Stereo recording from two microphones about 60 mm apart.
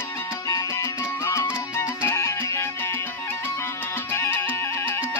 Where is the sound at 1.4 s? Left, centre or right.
Left.